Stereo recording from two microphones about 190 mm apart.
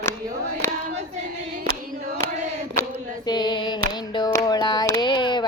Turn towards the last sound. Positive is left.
turn(degrees=25)  # may be behind; listen again after turning